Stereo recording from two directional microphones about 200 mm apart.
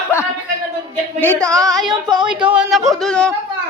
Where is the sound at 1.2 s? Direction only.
10° left (ahead or behind).